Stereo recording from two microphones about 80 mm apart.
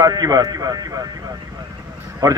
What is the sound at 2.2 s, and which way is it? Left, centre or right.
Speech, right.